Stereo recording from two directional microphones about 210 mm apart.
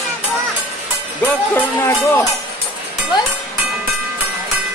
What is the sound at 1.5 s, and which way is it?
Speech, 15° left (ahead or behind).